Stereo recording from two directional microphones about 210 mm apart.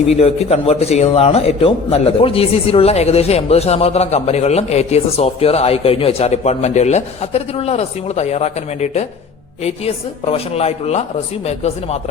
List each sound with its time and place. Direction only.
0.1 s a man's voice: 30° left (ahead or behind)